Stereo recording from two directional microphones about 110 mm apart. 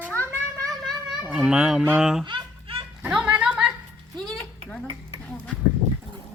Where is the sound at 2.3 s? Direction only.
55° right (ahead or behind).